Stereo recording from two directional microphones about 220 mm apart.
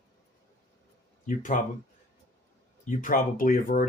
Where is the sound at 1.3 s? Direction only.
35° left (ahead or behind).